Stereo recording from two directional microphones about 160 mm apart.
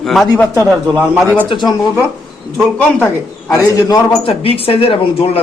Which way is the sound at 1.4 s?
30° left (ahead or behind).